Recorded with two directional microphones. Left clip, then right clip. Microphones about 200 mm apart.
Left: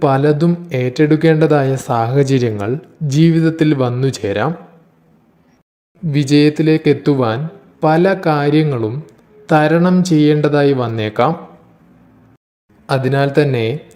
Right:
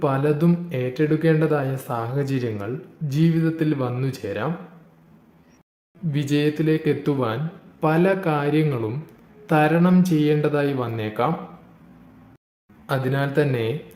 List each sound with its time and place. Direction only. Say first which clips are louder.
0.0 s speech: left 8 dB; 30° left (ahead or behind)
6.1 s a man's voice: left 10 dB; 25° left (ahead or behind)
12.9 s speech: left 9 dB; 30° left (ahead or behind)